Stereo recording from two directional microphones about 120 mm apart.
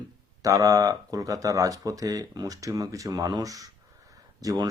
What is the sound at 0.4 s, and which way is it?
Speech, 30° right (ahead or behind).